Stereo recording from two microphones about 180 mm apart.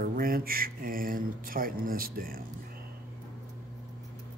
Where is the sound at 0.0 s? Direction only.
55° right (ahead or behind).